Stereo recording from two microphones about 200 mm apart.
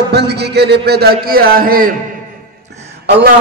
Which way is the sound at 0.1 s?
55° right (ahead or behind).